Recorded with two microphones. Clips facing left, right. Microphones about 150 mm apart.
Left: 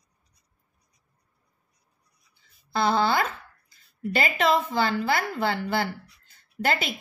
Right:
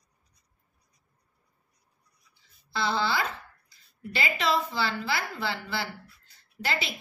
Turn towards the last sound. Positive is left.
turn(degrees=50)  # may be behind; listen again after turning